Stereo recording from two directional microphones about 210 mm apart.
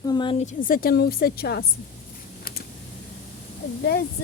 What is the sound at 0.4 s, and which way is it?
A woman's voice, 40° left (ahead or behind).